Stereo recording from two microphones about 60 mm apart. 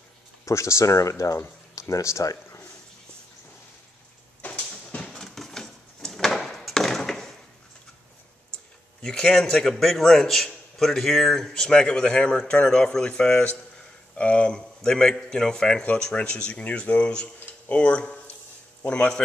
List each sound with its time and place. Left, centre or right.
0.5 s speech: left
4.4 s a sound: left
9.0 s a man's voice: centre